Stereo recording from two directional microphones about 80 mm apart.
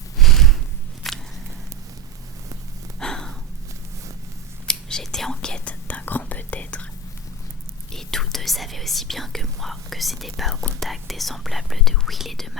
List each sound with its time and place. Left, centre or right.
0.2 s a sound: centre
3.0 s gasp: centre
4.7 s speech: centre
7.9 s speech: centre